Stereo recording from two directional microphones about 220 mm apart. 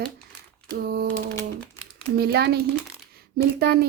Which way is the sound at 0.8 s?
45° right (ahead or behind).